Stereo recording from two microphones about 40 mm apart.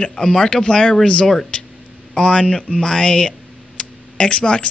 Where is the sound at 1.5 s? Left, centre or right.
Left.